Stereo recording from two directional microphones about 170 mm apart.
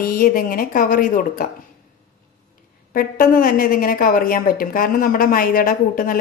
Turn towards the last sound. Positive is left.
turn(degrees=55)  # may be behind; listen again after turning